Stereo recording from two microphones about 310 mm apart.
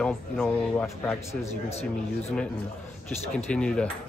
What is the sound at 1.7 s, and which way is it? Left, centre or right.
Speech, centre.